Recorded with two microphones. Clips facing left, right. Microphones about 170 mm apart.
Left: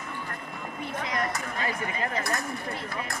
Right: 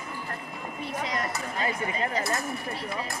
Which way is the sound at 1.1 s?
25° right (ahead or behind).